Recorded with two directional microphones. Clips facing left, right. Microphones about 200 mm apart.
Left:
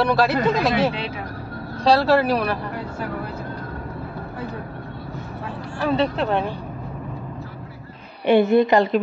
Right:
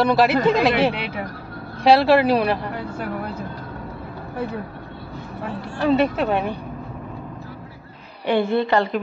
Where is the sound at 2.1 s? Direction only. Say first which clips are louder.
Right 2 dB; 15° right (ahead or behind).